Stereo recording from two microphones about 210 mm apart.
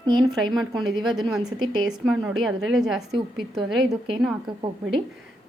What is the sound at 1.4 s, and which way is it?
Speech, 20° right (ahead or behind).